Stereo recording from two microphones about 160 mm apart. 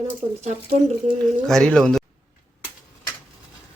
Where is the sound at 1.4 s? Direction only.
5° left (ahead or behind).